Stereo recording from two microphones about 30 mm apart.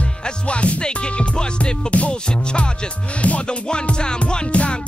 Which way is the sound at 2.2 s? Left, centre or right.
Left.